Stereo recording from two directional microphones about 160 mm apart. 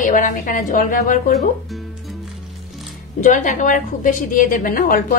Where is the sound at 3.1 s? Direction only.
50° left (ahead or behind).